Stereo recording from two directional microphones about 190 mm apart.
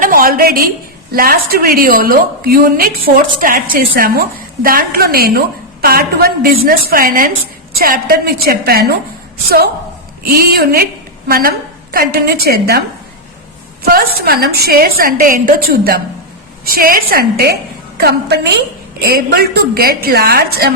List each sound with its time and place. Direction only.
0.0 s a sound: 50° right (ahead or behind)
1.1 s a woman's voice: 50° right (ahead or behind)
10.2 s a woman's voice: 50° right (ahead or behind)
13.8 s a woman's voice: 50° right (ahead or behind)